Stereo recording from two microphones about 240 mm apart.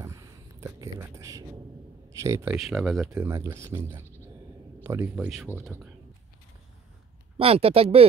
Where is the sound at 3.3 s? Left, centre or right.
Centre.